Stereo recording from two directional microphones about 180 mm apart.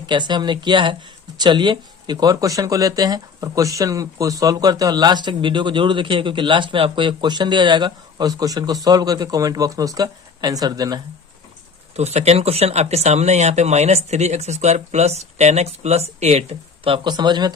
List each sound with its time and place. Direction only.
0.0 s speech: 25° right (ahead or behind)
11.9 s speech: 35° right (ahead or behind)